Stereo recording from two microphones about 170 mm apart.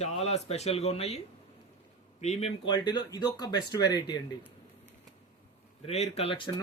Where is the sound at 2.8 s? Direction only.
25° left (ahead or behind).